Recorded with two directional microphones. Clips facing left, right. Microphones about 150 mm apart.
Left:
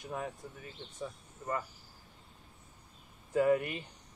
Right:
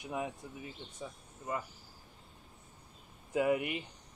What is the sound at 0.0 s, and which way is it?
Speech, 15° right (ahead or behind).